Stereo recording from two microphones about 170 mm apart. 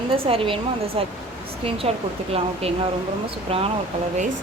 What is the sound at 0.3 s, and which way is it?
Speech, 30° right (ahead or behind).